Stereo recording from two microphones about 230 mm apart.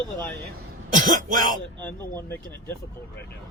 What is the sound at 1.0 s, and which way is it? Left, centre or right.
Speech, right.